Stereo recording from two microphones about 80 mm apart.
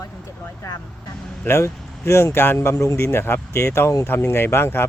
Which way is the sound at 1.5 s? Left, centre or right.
Left.